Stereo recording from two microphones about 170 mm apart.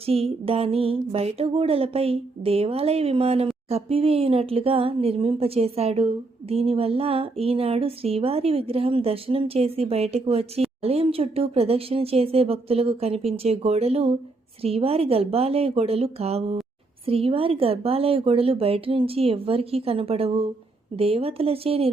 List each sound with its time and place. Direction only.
0.0 s music: 35° right (ahead or behind)
0.4 s speech: 35° right (ahead or behind)